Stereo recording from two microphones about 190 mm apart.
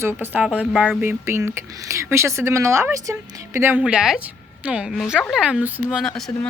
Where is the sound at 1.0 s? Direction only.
15° right (ahead or behind); by 6.5 s 5° left (ahead or behind).